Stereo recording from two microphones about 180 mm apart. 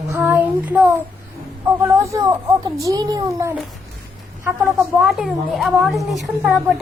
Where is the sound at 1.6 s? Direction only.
15° right (ahead or behind).